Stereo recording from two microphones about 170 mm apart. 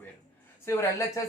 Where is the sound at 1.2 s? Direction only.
20° left (ahead or behind).